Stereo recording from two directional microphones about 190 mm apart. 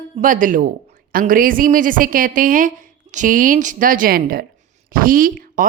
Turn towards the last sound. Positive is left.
turn(degrees=-45)  # may be behind; listen again after turning